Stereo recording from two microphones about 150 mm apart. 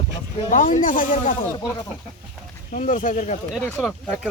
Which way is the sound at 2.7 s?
60° left (ahead or behind).